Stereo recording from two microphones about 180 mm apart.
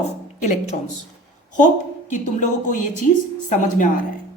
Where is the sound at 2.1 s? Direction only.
45° left (ahead or behind).